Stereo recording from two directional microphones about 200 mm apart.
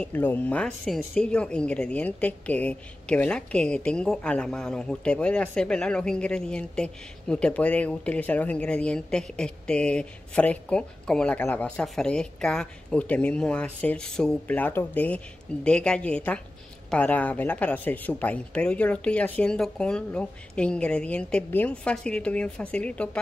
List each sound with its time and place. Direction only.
0.0 s speech: 10° left (ahead or behind)